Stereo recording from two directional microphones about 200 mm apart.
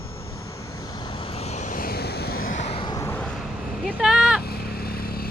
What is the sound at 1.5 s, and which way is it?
Vehicle, 40° left (ahead or behind).